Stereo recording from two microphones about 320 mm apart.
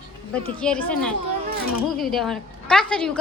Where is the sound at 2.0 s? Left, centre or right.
Centre.